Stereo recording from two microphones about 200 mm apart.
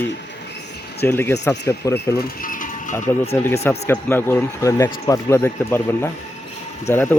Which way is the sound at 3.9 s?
10° left (ahead or behind).